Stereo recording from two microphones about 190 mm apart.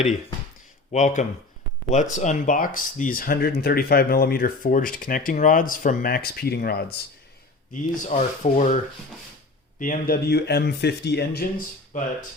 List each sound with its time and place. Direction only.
0.9 s speech: 40° left (ahead or behind); by 7.0 s 55° left (ahead or behind)
7.7 s speech: 40° left (ahead or behind)